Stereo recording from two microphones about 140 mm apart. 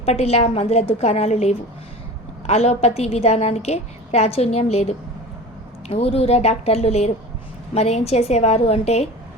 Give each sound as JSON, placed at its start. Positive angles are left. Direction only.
{"t": 0.0, "sound": "a woman's voice", "side_deg": 50}